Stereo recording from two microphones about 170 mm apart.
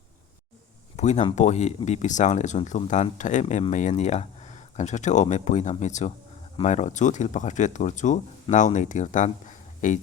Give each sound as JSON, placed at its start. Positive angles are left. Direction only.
{"t": 0.9, "sound": "speech", "side_deg": 40}